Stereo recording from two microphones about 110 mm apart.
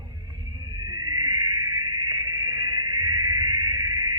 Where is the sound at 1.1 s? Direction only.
35° right (ahead or behind).